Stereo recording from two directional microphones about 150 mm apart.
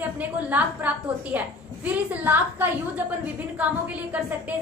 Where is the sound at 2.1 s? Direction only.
10° right (ahead or behind).